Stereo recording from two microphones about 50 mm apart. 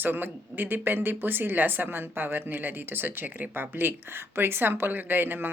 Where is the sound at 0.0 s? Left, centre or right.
Right.